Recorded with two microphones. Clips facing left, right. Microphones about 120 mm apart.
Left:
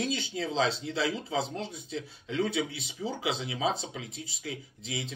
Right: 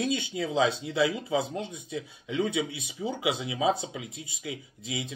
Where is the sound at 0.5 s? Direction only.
20° right (ahead or behind).